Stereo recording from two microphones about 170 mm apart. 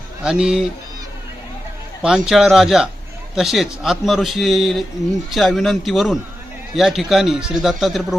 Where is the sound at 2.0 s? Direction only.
5° right (ahead or behind).